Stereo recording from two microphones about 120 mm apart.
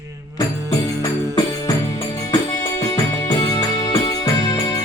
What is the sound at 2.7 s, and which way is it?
Music, 25° left (ahead or behind).